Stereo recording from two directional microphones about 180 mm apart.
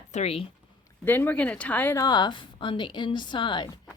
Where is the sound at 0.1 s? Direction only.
35° left (ahead or behind).